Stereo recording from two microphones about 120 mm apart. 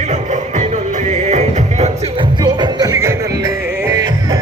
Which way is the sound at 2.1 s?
35° right (ahead or behind).